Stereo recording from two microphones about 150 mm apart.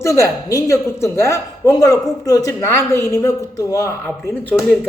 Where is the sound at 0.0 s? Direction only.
20° left (ahead or behind).